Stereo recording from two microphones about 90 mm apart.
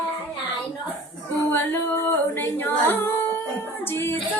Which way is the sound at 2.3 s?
25° left (ahead or behind).